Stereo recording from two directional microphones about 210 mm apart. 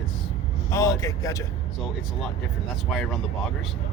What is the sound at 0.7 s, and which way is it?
Speech, 15° left (ahead or behind).